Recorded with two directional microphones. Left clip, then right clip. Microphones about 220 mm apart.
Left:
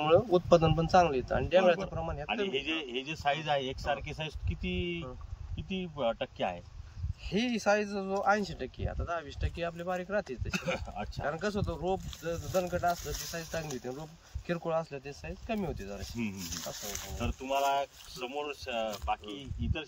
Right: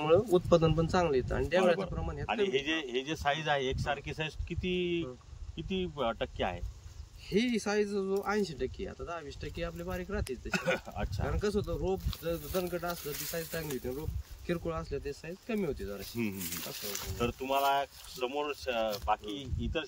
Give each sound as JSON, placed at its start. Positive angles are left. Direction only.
{"t": 0.0, "sound": "speech", "side_deg": 5}
{"t": 2.2, "sound": "speech", "side_deg": -20}
{"t": 7.2, "sound": "speech", "side_deg": 10}
{"t": 10.5, "sound": "speech", "side_deg": -15}
{"t": 11.2, "sound": "speech", "side_deg": 5}
{"t": 12.9, "sound": "speech", "side_deg": -15}
{"t": 14.5, "sound": "speech", "side_deg": 5}
{"t": 16.2, "sound": "speech", "side_deg": -15}